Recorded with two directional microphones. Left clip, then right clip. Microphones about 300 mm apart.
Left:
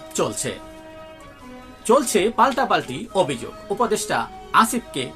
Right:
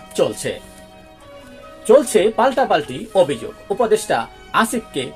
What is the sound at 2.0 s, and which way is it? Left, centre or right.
Speech, centre.